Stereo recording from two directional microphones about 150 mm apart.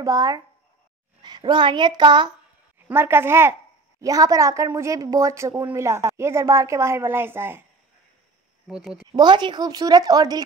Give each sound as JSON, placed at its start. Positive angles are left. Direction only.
{"t": 0.0, "sound": "a woman's voice", "side_deg": -25}
{"t": 2.9, "sound": "a woman's voice", "side_deg": -15}
{"t": 8.6, "sound": "speech", "side_deg": -5}
{"t": 9.1, "sound": "a woman's voice", "side_deg": -30}